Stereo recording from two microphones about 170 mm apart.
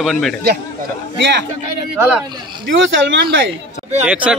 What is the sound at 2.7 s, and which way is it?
Speech, 90° right.